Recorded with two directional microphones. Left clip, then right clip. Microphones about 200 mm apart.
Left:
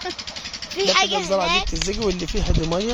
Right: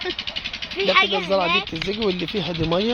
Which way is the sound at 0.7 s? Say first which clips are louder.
Right 1 dB; 65° left (ahead or behind).